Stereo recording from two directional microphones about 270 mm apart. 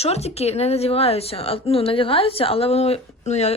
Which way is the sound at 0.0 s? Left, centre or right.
Left.